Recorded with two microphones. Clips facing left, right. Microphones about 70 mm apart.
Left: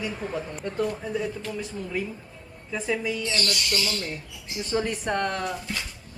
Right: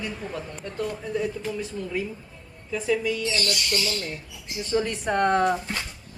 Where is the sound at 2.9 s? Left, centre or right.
Centre.